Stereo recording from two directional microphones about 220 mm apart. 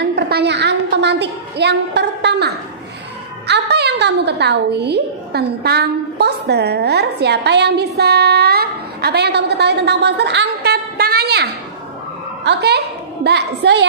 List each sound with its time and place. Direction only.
0.0 s a woman's voice: 45° right (ahead or behind)